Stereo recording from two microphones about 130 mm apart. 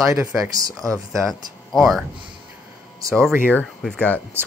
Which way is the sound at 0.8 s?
25° right (ahead or behind).